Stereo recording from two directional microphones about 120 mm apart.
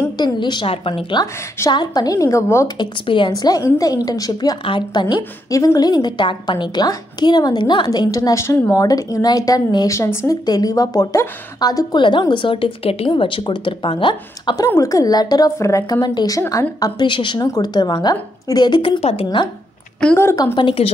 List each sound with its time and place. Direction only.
0.2 s a woman's voice: 40° left (ahead or behind)
1.7 s a woman's voice: 35° left (ahead or behind)
2.8 s a woman's voice: 40° left (ahead or behind)
17.0 s a woman's voice: 40° left (ahead or behind)
20.2 s a woman's voice: 20° left (ahead or behind)
20.5 s a woman's voice: 50° left (ahead or behind)